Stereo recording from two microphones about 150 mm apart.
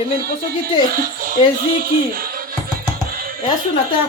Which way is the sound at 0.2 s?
85° right.